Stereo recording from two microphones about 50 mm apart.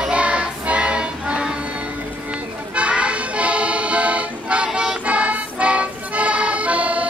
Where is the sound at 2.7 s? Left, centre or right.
Right.